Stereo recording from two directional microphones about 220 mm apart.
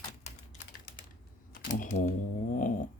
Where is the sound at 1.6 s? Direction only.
35° left (ahead or behind).